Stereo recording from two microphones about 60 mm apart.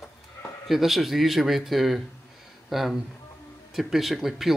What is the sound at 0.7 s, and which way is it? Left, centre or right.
Speech, centre.